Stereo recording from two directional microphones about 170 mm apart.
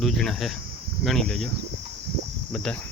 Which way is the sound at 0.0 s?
Centre (ahead or behind).